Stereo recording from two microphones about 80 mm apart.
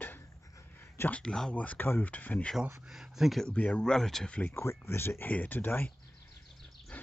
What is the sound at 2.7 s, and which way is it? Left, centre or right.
Speech, centre.